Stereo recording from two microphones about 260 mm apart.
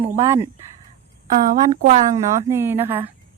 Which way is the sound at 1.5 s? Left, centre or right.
Right.